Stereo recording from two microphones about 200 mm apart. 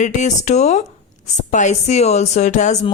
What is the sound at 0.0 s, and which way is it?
Speech, 35° left (ahead or behind).